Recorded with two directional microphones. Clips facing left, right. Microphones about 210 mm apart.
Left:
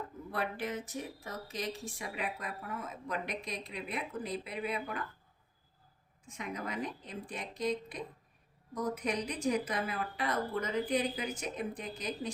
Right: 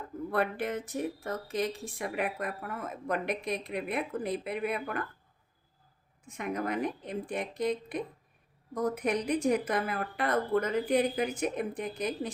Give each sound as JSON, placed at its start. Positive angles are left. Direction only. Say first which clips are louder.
{"t": 0.3, "sound": "speech", "louder": "right 6 dB", "side_deg": -55}
{"t": 6.2, "sound": "speech", "louder": "right 7 dB", "side_deg": -55}